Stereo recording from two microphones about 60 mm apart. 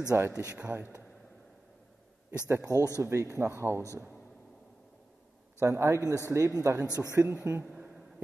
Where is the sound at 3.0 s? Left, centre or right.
Right.